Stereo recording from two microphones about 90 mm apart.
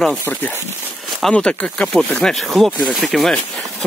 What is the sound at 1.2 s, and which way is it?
Speech, 10° left (ahead or behind).